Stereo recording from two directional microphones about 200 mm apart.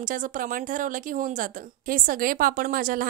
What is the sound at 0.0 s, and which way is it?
Speech, 40° right (ahead or behind).